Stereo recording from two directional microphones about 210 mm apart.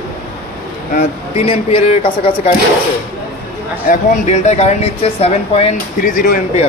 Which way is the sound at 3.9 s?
35° left (ahead or behind).